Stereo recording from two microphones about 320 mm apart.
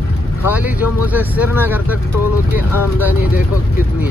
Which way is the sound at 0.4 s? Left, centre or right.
Centre.